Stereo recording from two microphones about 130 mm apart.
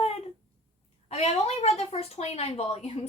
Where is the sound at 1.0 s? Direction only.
55° left (ahead or behind).